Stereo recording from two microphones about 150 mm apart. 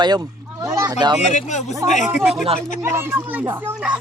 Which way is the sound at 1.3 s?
50° left (ahead or behind).